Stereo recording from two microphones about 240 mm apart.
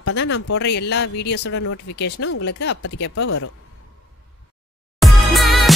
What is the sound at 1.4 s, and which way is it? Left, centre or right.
A woman's voice, left.